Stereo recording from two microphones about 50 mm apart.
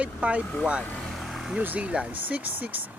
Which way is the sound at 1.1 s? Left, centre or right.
Centre.